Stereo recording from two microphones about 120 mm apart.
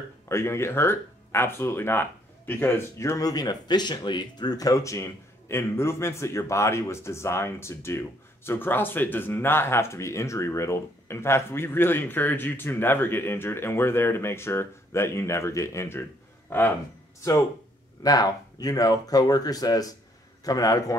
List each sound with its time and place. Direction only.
0.3 s speech: 20° left (ahead or behind)